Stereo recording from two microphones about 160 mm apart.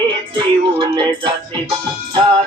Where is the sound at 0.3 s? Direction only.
30° right (ahead or behind).